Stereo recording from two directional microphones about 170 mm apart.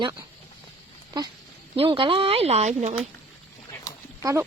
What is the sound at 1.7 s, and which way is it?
Speech, 30° right (ahead or behind).